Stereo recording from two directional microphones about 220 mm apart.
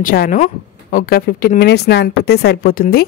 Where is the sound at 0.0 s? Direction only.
40° left (ahead or behind).